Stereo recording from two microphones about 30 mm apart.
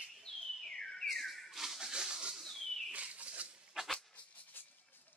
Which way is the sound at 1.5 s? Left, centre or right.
Centre.